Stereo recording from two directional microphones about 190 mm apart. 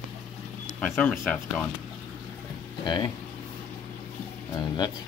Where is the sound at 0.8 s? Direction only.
5° left (ahead or behind).